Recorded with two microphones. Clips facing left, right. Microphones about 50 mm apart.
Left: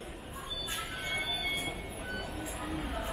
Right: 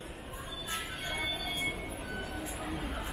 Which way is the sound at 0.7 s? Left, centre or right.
Centre.